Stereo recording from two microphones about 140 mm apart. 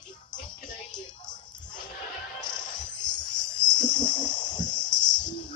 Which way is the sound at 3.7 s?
30° left (ahead or behind).